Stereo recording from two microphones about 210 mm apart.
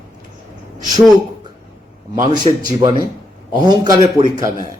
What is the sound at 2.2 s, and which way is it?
A man's voice, 20° right (ahead or behind).